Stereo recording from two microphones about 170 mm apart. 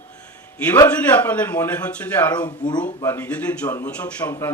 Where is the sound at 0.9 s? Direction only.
10° left (ahead or behind).